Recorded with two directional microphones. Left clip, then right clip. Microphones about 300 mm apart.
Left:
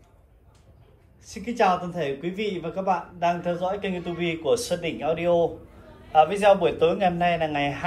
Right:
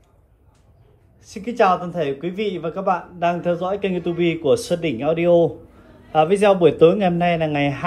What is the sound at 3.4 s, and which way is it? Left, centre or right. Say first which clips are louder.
Speech: right 5 dB; centre.